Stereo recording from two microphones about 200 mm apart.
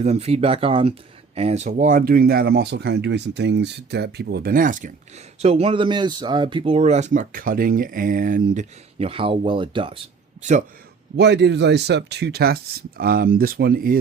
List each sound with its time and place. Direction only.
0.0 s speech: 30° right (ahead or behind)
11.2 s speech: 60° right (ahead or behind)